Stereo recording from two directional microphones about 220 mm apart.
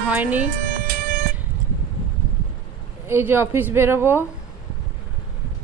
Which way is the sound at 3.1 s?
10° right (ahead or behind).